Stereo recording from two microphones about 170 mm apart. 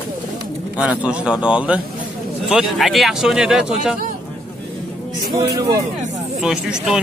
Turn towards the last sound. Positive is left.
turn(degrees=-5)  # may be behind; listen again after turning